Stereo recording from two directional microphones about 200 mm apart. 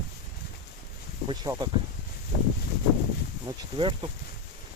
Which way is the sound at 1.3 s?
20° right (ahead or behind).